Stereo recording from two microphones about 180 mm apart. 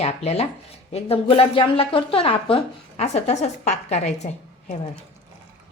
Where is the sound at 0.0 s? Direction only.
35° left (ahead or behind).